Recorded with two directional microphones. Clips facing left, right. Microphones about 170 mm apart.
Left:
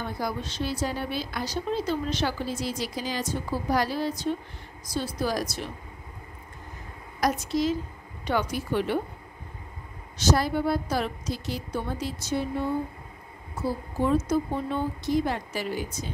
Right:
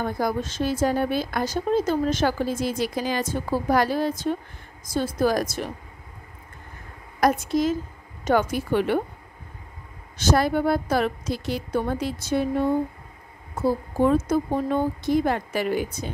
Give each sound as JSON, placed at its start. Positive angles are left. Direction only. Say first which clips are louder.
{"t": 0.0, "sound": "speech", "louder": "right 6 dB", "side_deg": -50}
{"t": 7.2, "sound": "a woman's voice", "louder": "right 4 dB", "side_deg": -55}
{"t": 10.1, "sound": "a woman's voice", "louder": "right 3 dB", "side_deg": -55}